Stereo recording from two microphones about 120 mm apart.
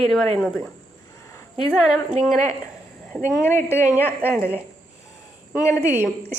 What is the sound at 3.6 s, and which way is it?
Speech, 15° right (ahead or behind).